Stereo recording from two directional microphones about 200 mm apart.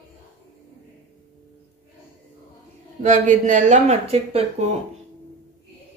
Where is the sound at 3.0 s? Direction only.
40° right (ahead or behind).